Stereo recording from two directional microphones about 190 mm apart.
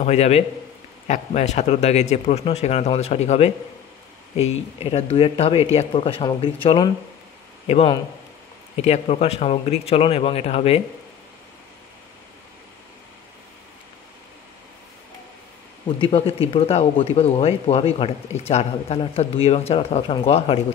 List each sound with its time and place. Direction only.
0.0 s a man's voice: 35° left (ahead or behind)
16.0 s speech: 30° left (ahead or behind)